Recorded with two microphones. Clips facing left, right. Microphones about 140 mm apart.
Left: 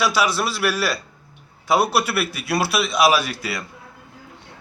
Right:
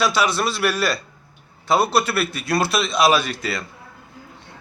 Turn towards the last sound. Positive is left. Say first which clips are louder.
# right 1 dB
turn(degrees=10)  # may be behind; listen again after turning